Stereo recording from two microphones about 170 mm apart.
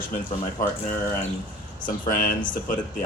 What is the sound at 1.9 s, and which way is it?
Speech, 50° left (ahead or behind).